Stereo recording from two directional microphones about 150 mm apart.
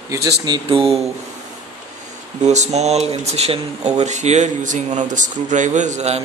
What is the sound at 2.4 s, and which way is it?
Speech, 45° right (ahead or behind).